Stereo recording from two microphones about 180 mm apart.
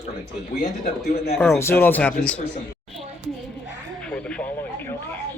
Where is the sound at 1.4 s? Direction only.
10° left (ahead or behind).